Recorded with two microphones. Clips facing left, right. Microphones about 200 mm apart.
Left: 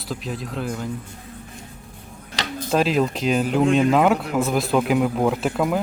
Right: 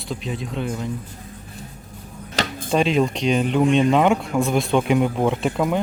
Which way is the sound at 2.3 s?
45° right (ahead or behind).